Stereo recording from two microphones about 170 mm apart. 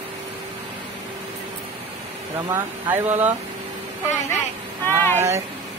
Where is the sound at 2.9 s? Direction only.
10° right (ahead or behind).